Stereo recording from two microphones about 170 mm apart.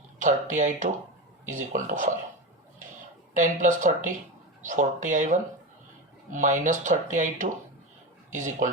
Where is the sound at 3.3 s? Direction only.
45° right (ahead or behind).